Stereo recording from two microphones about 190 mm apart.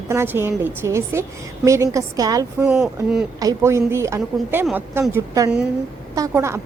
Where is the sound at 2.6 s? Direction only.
5° right (ahead or behind).